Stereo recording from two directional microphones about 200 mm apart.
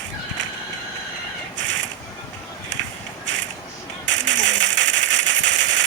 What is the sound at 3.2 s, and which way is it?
Creak, 65° right (ahead or behind).